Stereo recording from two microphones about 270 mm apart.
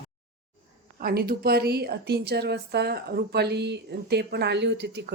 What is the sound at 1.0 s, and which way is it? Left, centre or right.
A woman's voice, right.